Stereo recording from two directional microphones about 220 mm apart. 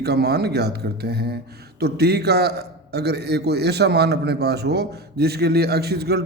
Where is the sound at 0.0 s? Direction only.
45° right (ahead or behind).